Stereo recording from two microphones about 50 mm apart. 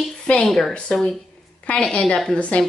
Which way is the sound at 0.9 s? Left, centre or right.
Centre.